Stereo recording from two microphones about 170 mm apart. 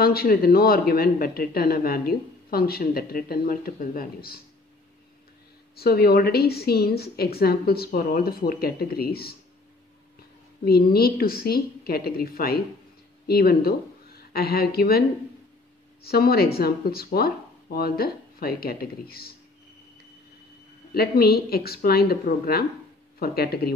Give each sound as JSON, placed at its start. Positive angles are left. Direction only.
{"t": 0.0, "sound": "speech", "side_deg": 60}
{"t": 5.8, "sound": "speech", "side_deg": 65}
{"t": 10.6, "sound": "speech", "side_deg": 65}
{"t": 20.9, "sound": "speech", "side_deg": 65}